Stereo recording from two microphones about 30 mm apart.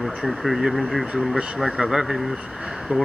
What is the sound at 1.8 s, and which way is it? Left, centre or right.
Speech, right.